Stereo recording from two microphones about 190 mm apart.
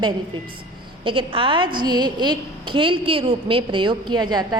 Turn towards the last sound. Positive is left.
turn(degrees=-20)  # may be behind; listen again after turning